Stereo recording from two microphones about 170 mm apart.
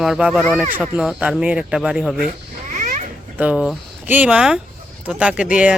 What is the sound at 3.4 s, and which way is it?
Speech, 5° right (ahead or behind).